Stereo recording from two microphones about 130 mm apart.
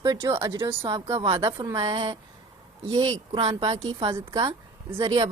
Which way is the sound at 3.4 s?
55° right (ahead or behind).